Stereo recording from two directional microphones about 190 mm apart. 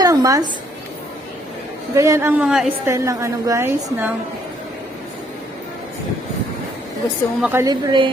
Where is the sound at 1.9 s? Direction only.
15° right (ahead or behind).